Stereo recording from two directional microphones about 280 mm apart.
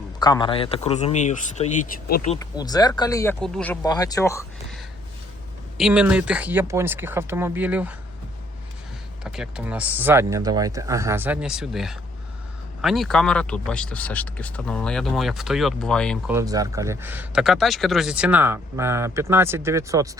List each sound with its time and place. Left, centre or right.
0.2 s speech: centre
2.3 s speech: centre
5.7 s speech: centre
9.2 s speech: centre
16.3 s speech: centre